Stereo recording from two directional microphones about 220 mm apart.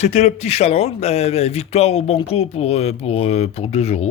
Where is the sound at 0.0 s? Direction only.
30° left (ahead or behind).